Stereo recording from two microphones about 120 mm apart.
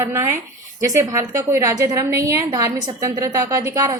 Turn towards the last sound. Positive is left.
turn(degrees=-25)  # may be behind; listen again after turning